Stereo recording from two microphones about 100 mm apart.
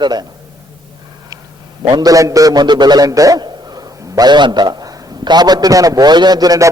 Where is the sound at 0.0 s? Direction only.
45° right (ahead or behind).